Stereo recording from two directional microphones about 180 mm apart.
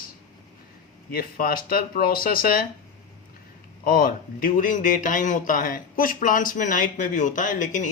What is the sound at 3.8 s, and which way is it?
A man's voice, 55° left (ahead or behind).